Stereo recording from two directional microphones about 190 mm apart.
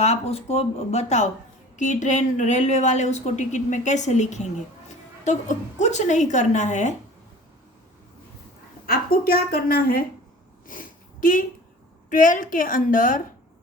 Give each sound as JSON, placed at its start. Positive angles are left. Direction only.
{"t": 0.0, "sound": "a woman's voice", "side_deg": 35}
{"t": 9.2, "sound": "a woman's voice", "side_deg": 50}
{"t": 10.7, "sound": "a sound", "side_deg": 45}
{"t": 12.0, "sound": "a woman's voice", "side_deg": 45}